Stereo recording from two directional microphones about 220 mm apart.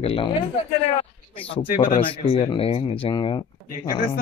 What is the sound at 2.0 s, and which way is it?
Speech, 25° left (ahead or behind).